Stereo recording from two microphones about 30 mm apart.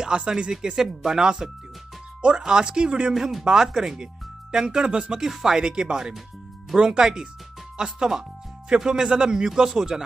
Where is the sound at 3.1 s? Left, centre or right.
Centre.